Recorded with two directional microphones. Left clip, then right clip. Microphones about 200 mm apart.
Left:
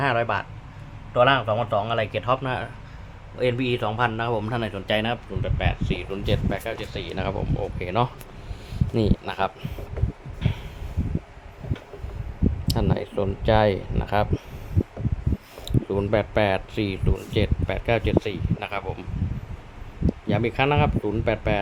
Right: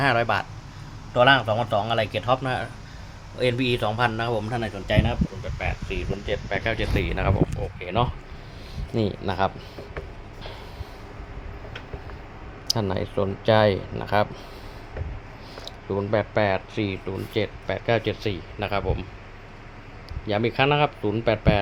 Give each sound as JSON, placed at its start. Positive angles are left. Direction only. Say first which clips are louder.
{"t": 0.0, "sound": "speech", "louder": "right 1 dB", "side_deg": -5}
{"t": 10.4, "sound": "a sound", "louder": "left 6 dB", "side_deg": 15}
{"t": 12.6, "sound": "speech", "louder": "right 3 dB", "side_deg": 0}
{"t": 15.9, "sound": "speech", "louder": "even", "side_deg": 15}
{"t": 20.2, "sound": "speech", "louder": "right 2 dB", "side_deg": 0}